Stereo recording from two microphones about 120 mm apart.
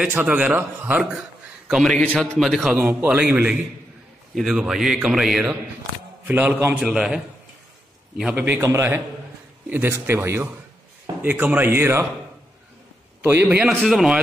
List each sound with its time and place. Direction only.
0.0 s a man's voice: 15° right (ahead or behind)
1.7 s a man's voice: centre (ahead or behind)
6.2 s a man's voice: 15° right (ahead or behind)
8.4 s a man's voice: 20° right (ahead or behind)
13.2 s a man's voice: 20° right (ahead or behind)
13.7 s a man's voice: centre (ahead or behind)